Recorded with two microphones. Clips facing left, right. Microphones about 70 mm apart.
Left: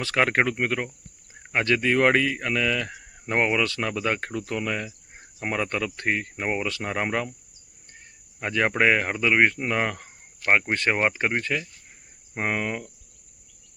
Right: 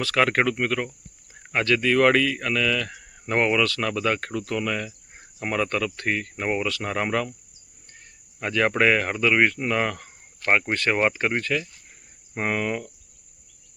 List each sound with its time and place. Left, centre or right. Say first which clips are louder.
0.0 s speech: right 1 dB; left
8.4 s speech: right 1 dB; left